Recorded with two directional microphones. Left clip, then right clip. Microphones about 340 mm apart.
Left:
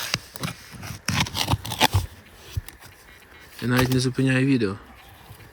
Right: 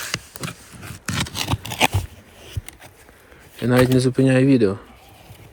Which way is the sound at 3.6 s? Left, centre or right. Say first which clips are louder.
Right 6 dB; centre.